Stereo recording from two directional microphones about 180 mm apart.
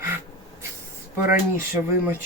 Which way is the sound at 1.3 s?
10° right (ahead or behind).